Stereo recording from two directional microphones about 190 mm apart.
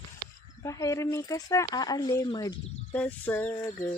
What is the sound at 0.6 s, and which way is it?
Speech, 15° left (ahead or behind).